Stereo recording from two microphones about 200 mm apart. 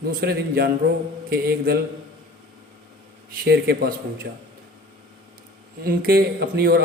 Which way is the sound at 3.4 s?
50° right (ahead or behind).